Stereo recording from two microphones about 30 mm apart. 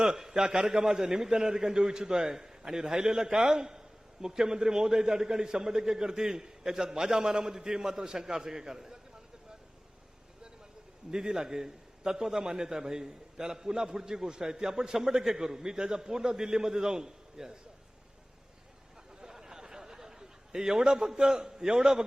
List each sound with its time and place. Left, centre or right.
0.0 s a man's voice: right
11.1 s a man's voice: right
19.2 s chuckle: centre
21.2 s a man's voice: right